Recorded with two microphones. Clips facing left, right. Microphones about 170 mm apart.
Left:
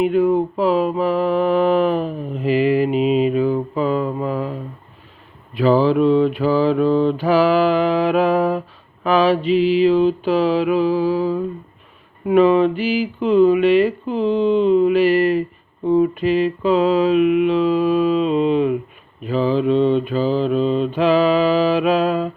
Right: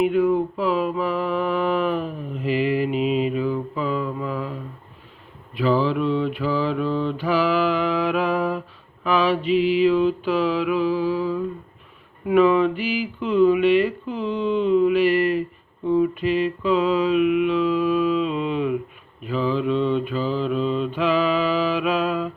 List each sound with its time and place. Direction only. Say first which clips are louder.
0.0 s mantra: left 3 dB; 35° left (ahead or behind)
3.0 s mantra: left 5 dB; centre (ahead or behind)
3.3 s mantra: left 6 dB; 40° left (ahead or behind)
5.5 s speech: left 6 dB; 40° left (ahead or behind)